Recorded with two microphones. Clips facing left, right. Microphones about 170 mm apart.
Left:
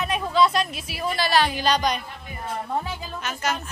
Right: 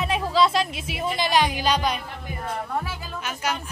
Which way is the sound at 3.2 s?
10° right (ahead or behind).